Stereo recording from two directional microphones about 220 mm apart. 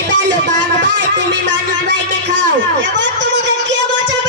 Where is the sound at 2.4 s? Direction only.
55° right (ahead or behind).